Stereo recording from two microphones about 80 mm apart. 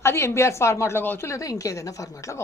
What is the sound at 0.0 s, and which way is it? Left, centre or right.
A woman's voice, left.